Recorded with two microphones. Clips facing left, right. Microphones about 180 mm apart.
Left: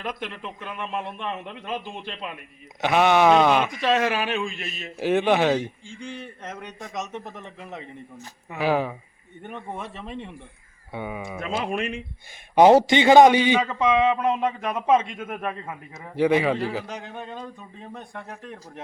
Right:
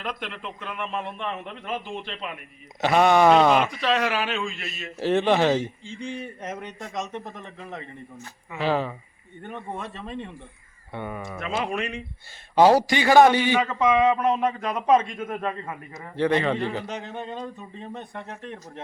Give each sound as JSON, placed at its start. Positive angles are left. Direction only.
{"t": 0.1, "sound": "a man's voice", "side_deg": 15}
{"t": 2.8, "sound": "a man's voice", "side_deg": 0}
{"t": 3.8, "sound": "a man's voice", "side_deg": 20}
{"t": 5.0, "sound": "a man's voice", "side_deg": 5}
{"t": 7.4, "sound": "a man's voice", "side_deg": 15}
{"t": 11.7, "sound": "a man's voice", "side_deg": 25}